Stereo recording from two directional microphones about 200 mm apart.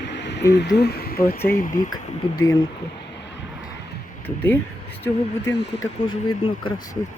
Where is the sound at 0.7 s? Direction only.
55° left (ahead or behind).